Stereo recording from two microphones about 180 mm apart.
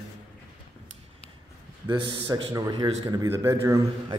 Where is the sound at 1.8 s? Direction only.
25° right (ahead or behind).